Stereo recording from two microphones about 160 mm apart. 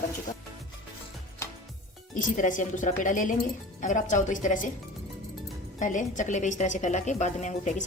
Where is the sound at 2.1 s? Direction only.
55° left (ahead or behind).